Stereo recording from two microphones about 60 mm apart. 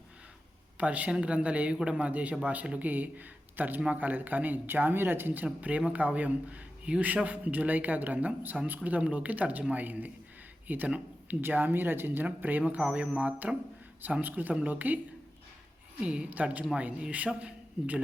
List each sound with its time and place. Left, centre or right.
0.8 s a woman's voice: right
5.5 s speech: right
16.0 s speech: centre